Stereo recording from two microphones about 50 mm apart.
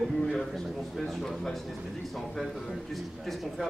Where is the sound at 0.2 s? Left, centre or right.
Centre.